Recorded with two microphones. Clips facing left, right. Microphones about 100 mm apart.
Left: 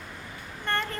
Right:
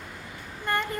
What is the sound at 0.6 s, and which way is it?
Speech, 10° right (ahead or behind).